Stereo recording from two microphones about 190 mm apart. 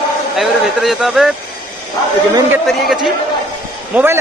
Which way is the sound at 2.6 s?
Centre (ahead or behind).